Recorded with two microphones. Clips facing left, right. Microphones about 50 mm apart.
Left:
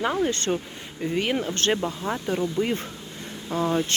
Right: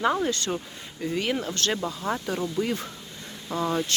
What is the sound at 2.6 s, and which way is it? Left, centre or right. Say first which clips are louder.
Speech: left 2 dB; left.